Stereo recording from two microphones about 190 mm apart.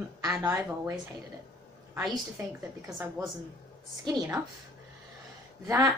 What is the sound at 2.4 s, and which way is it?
Speech, 15° right (ahead or behind).